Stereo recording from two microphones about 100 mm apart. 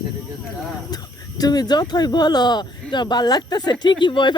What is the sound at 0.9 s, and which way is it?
Speech, 40° left (ahead or behind).